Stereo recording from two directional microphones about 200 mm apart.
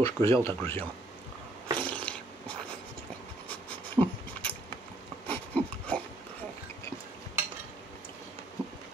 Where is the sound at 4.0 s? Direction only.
10° right (ahead or behind).